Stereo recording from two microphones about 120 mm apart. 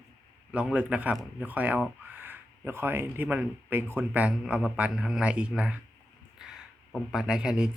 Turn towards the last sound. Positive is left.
turn(degrees=-5)  # may be behind; listen again after turning